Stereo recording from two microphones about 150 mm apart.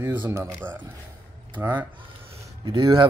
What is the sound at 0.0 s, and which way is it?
Speech, 15° right (ahead or behind).